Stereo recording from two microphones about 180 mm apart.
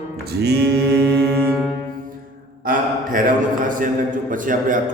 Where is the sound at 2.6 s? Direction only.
50° right (ahead or behind).